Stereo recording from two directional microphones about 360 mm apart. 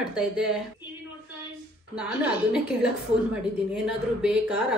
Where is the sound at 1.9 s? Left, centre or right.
Centre.